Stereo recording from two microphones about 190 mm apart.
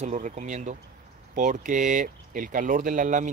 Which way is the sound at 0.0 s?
35° right (ahead or behind).